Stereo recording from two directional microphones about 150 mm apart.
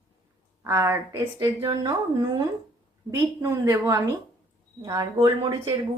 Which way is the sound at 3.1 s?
20° right (ahead or behind).